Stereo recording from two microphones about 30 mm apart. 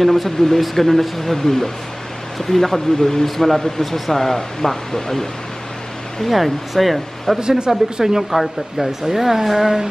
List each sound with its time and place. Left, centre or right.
0.0 s speech: centre
6.2 s speech: centre
7.3 s speech: right
7.7 s speech: centre